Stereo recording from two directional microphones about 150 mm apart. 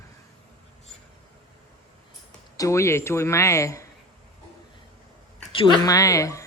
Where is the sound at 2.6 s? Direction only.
20° left (ahead or behind).